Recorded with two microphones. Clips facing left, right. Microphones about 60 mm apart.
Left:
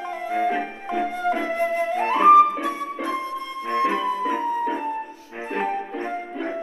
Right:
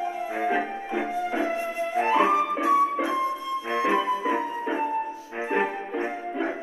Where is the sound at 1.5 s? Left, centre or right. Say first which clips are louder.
Left 5 dB; left.